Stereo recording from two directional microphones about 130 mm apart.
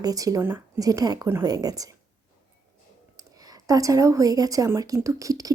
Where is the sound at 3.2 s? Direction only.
25° right (ahead or behind).